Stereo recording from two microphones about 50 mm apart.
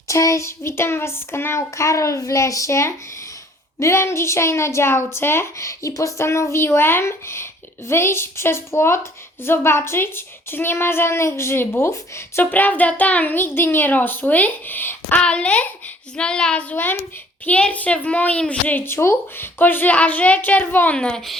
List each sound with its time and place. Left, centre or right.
0.1 s speech: left
1.5 s a child's voice: left
5.5 s a child's voice: left
12.4 s a woman's voice: left
15.2 s a woman's voice: left
16.7 s a woman's voice: left
17.6 s a woman's voice: left
18.8 s a child's voice: left
20.7 s a child's voice: left
20.9 s a woman's voice: centre